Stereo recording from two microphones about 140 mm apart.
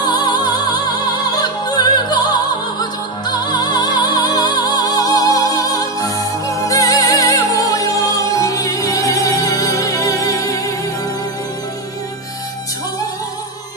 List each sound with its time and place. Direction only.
0.0 s music: 30° left (ahead or behind)